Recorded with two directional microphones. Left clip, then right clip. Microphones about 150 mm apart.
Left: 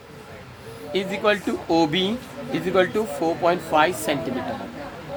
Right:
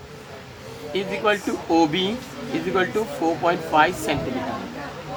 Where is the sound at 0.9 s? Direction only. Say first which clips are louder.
Even; 40° left (ahead or behind).